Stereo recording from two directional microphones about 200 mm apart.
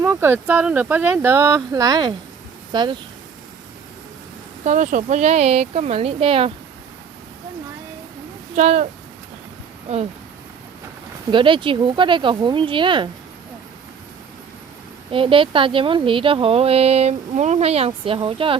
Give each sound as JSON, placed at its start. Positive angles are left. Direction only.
{"t": 0.0, "sound": "speech", "side_deg": -10}
{"t": 4.6, "sound": "speech", "side_deg": -40}
{"t": 8.5, "sound": "speech", "side_deg": -35}
{"t": 11.3, "sound": "speech", "side_deg": -25}
{"t": 15.1, "sound": "speech", "side_deg": -25}